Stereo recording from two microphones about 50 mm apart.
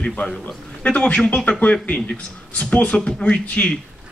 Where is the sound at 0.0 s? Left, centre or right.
Left.